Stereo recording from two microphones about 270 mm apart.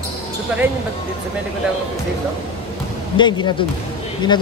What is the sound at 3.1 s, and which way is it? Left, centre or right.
Speech, centre.